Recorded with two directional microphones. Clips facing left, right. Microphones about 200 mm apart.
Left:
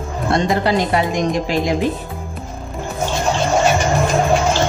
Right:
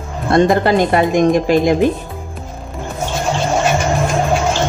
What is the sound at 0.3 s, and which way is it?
A woman's voice, 50° right (ahead or behind).